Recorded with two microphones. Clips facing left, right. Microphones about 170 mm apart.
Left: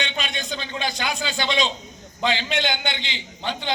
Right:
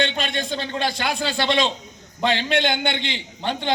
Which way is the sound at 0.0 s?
55° right (ahead or behind).